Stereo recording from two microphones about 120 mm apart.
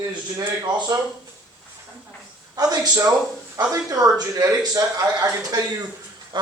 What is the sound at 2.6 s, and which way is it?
A man's voice, 35° right (ahead or behind).